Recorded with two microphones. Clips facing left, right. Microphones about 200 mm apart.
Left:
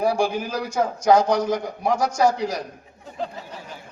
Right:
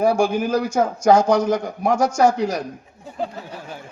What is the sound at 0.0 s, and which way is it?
A man's voice, 45° right (ahead or behind).